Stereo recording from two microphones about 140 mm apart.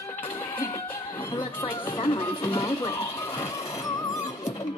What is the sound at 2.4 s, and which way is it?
Music, 20° left (ahead or behind).